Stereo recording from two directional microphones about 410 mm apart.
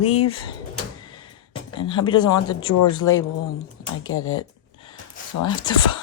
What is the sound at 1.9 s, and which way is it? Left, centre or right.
A woman's voice, centre.